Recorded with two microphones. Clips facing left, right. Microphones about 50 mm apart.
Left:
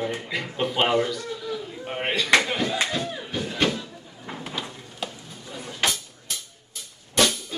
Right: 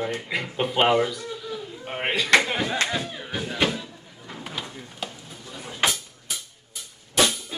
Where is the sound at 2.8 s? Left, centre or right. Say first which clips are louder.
Even; centre.